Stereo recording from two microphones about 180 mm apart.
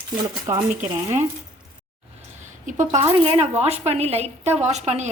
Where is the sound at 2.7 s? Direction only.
45° right (ahead or behind).